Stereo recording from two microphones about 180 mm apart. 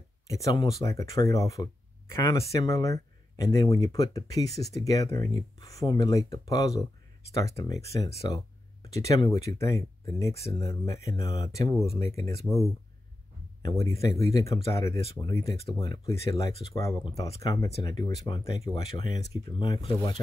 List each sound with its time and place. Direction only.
0.3 s speech: 20° left (ahead or behind)